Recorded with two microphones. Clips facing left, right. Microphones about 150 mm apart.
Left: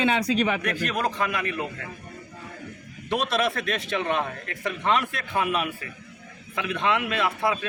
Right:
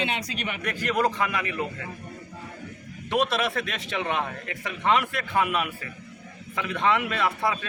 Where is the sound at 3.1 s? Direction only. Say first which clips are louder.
Even; 10° right (ahead or behind).